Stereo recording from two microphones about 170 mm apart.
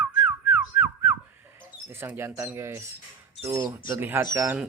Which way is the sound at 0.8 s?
15° right (ahead or behind).